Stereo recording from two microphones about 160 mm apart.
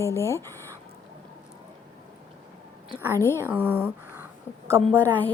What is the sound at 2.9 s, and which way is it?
Speech, 15° right (ahead or behind).